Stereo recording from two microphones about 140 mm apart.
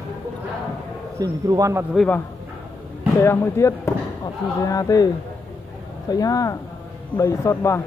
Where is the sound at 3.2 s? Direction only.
20° left (ahead or behind).